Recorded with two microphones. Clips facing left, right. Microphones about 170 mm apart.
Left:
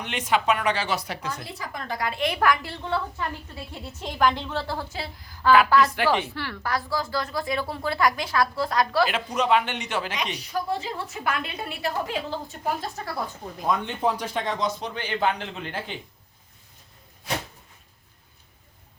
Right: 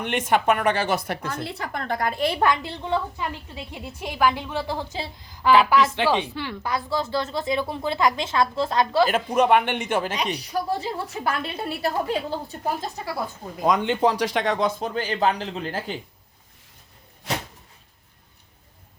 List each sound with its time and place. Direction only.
0.0 s a woman's voice: 50° right (ahead or behind)
2.2 s a woman's voice: 25° right (ahead or behind)
9.0 s a woman's voice: 50° right (ahead or behind)
13.6 s speech: 90° right; by 16.0 s 40° right (ahead or behind)